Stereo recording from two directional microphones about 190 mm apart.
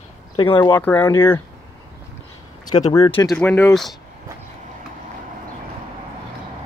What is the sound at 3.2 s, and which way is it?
Speech, 10° left (ahead or behind).